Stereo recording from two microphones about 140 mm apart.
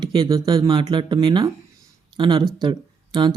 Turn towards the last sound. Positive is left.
turn(degrees=-35)  # may be behind; listen again after turning